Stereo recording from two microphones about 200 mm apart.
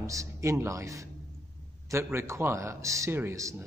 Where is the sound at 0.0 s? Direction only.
15° right (ahead or behind).